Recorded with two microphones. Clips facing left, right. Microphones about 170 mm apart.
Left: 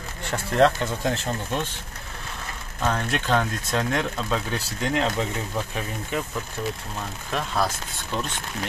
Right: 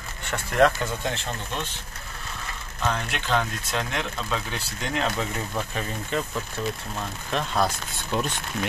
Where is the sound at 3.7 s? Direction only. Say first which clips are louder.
Left 7 dB; 45° left (ahead or behind).